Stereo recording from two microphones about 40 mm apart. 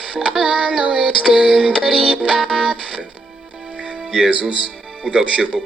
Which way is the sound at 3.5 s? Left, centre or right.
Right.